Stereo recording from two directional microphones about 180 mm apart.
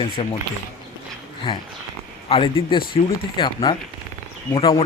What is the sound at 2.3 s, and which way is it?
Speech, 30° left (ahead or behind).